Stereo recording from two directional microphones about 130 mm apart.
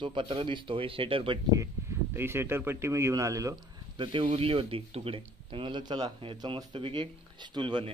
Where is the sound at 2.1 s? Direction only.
20° right (ahead or behind).